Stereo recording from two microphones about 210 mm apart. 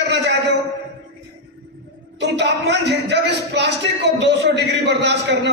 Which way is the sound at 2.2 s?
55° right (ahead or behind).